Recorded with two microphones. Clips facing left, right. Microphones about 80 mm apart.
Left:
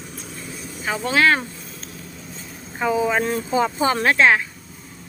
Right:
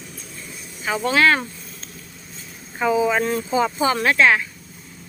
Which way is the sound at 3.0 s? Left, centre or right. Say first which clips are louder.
Right 1 dB; centre.